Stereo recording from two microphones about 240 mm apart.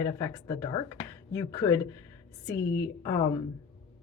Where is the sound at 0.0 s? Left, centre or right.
Centre.